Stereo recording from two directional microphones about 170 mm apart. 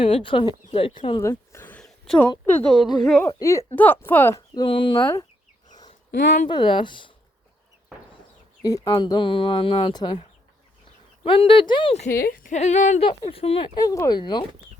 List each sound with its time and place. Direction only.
0.0 s speech: 30° left (ahead or behind)
1.2 s a sound: 15° left (ahead or behind)
2.6 s a woman's voice: centre (ahead or behind)
3.2 s speech: 15° left (ahead or behind)
6.5 s speech: 30° left (ahead or behind)
8.6 s speech: 25° left (ahead or behind)
12.1 s speech: 55° left (ahead or behind)
13.1 s speech: 35° left (ahead or behind)
13.7 s speech: 20° left (ahead or behind)